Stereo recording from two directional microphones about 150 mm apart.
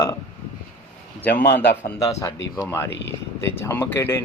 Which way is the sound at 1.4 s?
15° left (ahead or behind).